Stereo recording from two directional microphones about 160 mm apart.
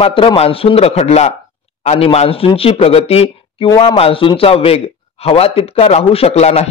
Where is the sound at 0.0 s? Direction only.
35° left (ahead or behind).